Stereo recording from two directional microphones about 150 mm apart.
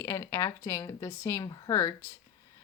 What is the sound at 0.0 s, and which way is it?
Speech, 20° left (ahead or behind).